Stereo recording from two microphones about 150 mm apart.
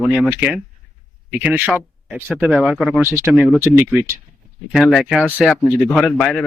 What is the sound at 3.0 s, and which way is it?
Speech, 15° right (ahead or behind).